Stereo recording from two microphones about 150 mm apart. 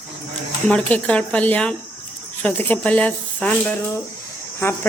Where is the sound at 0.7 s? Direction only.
10° left (ahead or behind).